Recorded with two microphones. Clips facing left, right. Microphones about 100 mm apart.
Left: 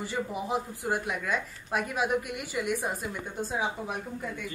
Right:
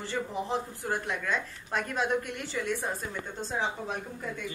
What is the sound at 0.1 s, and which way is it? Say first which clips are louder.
A woman's voice: even; 10° left (ahead or behind).